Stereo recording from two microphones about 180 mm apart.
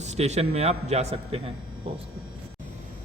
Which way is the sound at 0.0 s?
35° right (ahead or behind).